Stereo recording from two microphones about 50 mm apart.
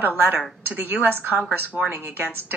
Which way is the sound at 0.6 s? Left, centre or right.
Right.